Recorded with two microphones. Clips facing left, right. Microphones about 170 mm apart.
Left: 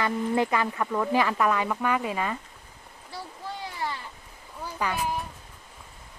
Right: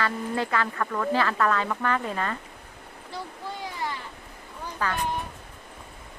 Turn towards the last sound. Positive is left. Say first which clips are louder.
# even
turn(degrees=10)  # may be behind; listen again after turning